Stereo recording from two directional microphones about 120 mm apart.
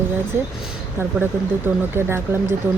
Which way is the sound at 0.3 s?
20° right (ahead or behind).